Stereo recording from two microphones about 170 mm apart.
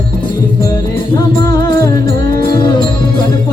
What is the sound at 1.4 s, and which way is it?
Music, 20° left (ahead or behind).